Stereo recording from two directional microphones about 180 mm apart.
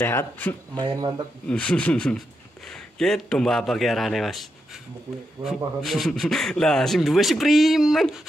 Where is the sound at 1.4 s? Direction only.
5° left (ahead or behind).